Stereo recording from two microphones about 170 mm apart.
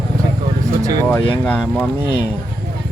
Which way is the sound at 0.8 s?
20° right (ahead or behind).